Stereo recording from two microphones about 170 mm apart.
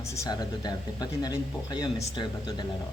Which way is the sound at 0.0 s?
20° left (ahead or behind).